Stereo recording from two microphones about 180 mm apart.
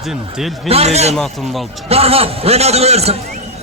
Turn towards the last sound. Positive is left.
turn(degrees=-35)  # may be behind; listen again after turning